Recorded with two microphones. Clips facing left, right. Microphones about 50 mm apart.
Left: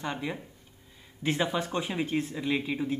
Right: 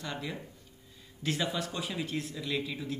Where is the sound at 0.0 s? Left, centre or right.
Left.